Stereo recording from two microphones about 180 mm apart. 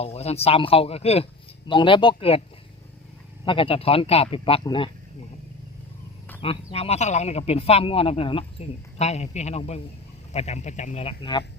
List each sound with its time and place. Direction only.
0.0 s speech: 35° left (ahead or behind)
3.4 s speech: 30° left (ahead or behind)
6.4 s speech: 35° left (ahead or behind)